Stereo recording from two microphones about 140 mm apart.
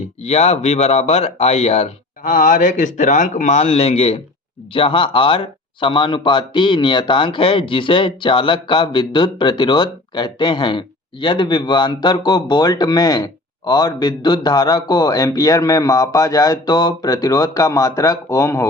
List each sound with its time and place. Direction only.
0.2 s speech: 50° left (ahead or behind)
2.3 s a man's voice: 65° left (ahead or behind); by 18.7 s 20° left (ahead or behind)